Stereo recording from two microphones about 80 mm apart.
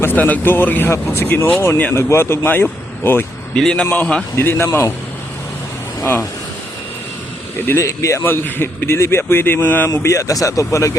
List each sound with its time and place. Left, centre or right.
0.0 s speech: left
1.5 s a man's voice: left
3.5 s a man's voice: centre
4.4 s a man's voice: left
6.0 s speech: left
7.8 s a man's voice: left
8.2 s speech: left
9.9 s a man's voice: left